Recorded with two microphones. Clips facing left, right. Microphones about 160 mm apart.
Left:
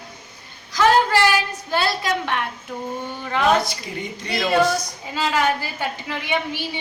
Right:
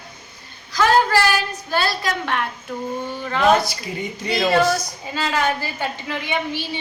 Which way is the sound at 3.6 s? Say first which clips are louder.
Right 2 dB; 5° right (ahead or behind).